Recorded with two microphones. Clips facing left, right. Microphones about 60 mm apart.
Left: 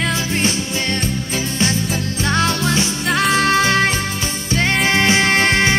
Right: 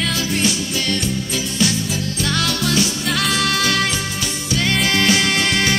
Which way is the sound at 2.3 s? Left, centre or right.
Left.